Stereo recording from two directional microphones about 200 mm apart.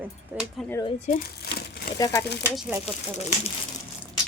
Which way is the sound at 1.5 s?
55° left (ahead or behind).